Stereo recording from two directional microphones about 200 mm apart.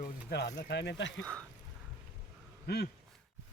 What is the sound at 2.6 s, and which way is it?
Speech, 50° left (ahead or behind).